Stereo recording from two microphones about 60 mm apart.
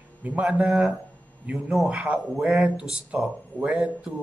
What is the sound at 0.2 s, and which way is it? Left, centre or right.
Speech, right.